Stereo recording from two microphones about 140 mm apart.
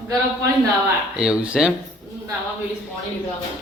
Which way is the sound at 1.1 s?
5° right (ahead or behind).